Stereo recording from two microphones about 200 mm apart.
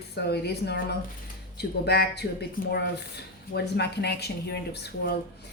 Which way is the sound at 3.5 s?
55° left (ahead or behind).